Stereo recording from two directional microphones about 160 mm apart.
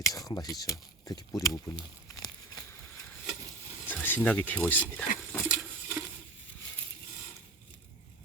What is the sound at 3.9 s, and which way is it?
Speech, 10° left (ahead or behind).